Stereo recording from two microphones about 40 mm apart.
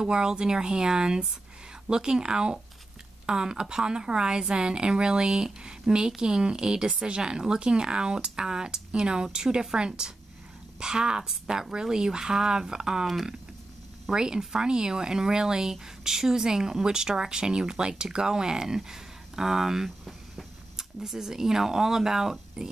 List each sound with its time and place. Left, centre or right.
0.0 s speech: centre
13.0 s speech: centre
14.1 s speech: centre